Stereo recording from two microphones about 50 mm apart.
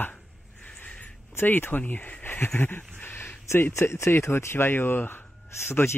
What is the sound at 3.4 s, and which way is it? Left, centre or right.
Speech, left.